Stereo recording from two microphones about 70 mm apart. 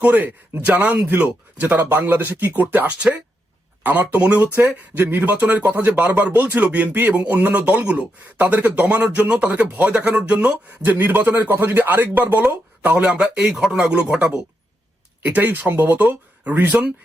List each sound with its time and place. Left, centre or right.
0.0 s speech: right
13.2 s speech: centre